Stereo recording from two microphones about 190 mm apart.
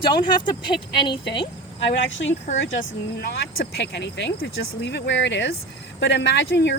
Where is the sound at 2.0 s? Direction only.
80° left.